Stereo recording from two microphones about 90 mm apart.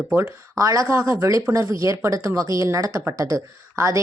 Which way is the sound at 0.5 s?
40° right (ahead or behind).